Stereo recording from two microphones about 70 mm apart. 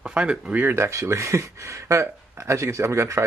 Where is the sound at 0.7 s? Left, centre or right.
Right.